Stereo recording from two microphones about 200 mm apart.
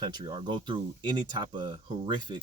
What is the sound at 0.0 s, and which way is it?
Speech, 20° right (ahead or behind).